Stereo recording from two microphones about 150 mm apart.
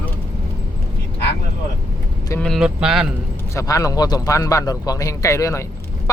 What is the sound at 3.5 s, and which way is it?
A man's voice, 20° left (ahead or behind).